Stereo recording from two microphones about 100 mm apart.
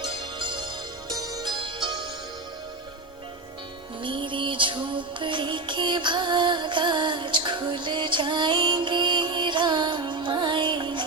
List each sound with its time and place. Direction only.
0.0 s music: 50° right (ahead or behind)
4.0 s music: 55° right (ahead or behind)